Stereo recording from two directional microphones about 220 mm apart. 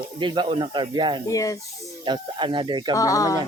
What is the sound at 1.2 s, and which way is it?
Speech, 15° left (ahead or behind).